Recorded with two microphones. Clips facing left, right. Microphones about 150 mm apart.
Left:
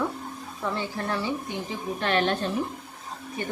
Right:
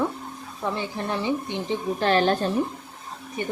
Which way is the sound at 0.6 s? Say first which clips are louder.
Right 2 dB; 15° right (ahead or behind).